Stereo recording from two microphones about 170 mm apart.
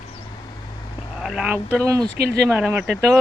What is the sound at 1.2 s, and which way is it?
Vehicle, 5° right (ahead or behind).